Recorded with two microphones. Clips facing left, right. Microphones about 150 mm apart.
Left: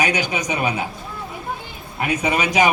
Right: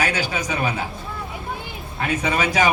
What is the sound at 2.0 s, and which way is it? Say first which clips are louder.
Speech: left 1 dB; 15° left (ahead or behind).